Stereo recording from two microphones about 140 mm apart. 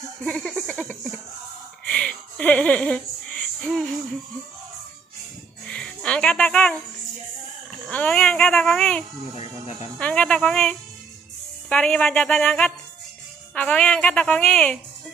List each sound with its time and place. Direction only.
0.2 s a sound: 5° left (ahead or behind)
5.7 s music: 10° left (ahead or behind)
7.9 s a woman's voice: 10° left (ahead or behind)
9.4 s music: 50° left (ahead or behind)
9.9 s a woman's voice: 10° left (ahead or behind)